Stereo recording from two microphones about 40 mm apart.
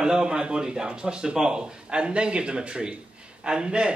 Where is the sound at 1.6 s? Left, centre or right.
Right.